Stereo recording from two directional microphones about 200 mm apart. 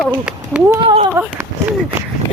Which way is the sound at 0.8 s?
25° right (ahead or behind).